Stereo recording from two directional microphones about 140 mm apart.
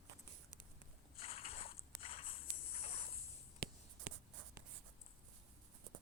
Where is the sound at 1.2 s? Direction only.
45° left (ahead or behind).